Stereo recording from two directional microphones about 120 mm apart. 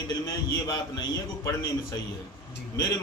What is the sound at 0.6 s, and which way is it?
Speech, 35° left (ahead or behind).